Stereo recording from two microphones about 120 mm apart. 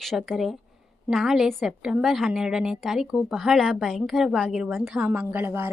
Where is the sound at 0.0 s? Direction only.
Centre (ahead or behind).